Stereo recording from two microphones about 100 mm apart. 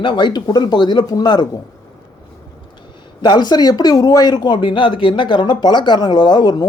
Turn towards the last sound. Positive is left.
turn(degrees=45)  # may be behind; listen again after turning